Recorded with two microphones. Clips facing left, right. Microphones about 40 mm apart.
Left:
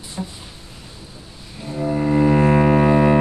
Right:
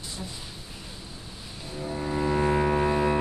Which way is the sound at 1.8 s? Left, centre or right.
Left.